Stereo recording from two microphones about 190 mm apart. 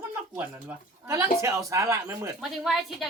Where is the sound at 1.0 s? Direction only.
15° right (ahead or behind).